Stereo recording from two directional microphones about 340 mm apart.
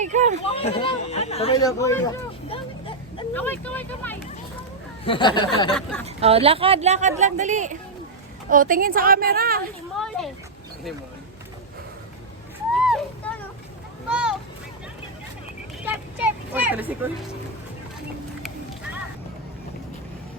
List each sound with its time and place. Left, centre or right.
0.0 s a woman's voice: right
0.3 s speech: centre
6.1 s a woman's voice: centre
9.9 s speech: centre
12.7 s a sound: centre
15.8 s children playing: centre